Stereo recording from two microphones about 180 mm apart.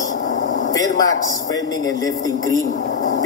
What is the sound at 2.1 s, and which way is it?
Speech, 90° left.